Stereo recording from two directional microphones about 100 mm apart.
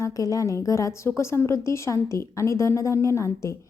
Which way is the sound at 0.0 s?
35° left (ahead or behind).